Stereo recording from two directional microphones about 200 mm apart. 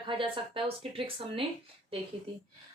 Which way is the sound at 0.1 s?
25° right (ahead or behind).